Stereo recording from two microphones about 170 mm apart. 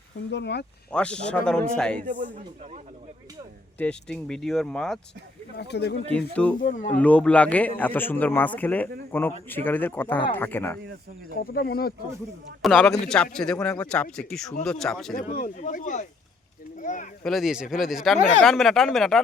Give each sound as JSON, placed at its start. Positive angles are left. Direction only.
{"t": 0.3, "sound": "speech", "side_deg": 90}
{"t": 0.9, "sound": "speech", "side_deg": 5}
{"t": 2.0, "sound": "speech", "side_deg": -50}
{"t": 3.8, "sound": "speech", "side_deg": 5}
{"t": 5.5, "sound": "speech", "side_deg": 80}
{"t": 6.1, "sound": "speech", "side_deg": 10}
{"t": 6.6, "sound": "speech", "side_deg": 50}
{"t": 7.0, "sound": "speech", "side_deg": 5}
{"t": 11.3, "sound": "speech", "side_deg": 65}
{"t": 12.6, "sound": "speech", "side_deg": 0}
{"t": 15.1, "sound": "speech", "side_deg": 55}
{"t": 17.2, "sound": "speech", "side_deg": 0}